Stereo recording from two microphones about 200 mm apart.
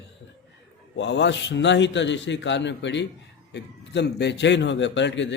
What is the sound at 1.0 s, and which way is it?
A man's voice, 60° left (ahead or behind).